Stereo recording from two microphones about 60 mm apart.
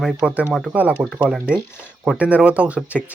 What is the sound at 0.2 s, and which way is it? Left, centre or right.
Speech, centre.